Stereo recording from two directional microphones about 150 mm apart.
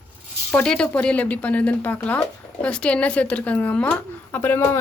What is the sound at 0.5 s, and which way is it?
Speech, 5° left (ahead or behind).